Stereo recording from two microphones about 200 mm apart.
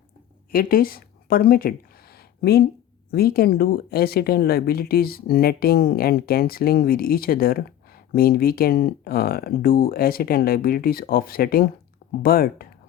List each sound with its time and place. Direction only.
0.5 s speech: 45° left (ahead or behind)